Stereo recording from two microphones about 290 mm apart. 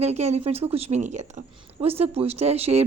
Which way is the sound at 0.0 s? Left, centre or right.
Right.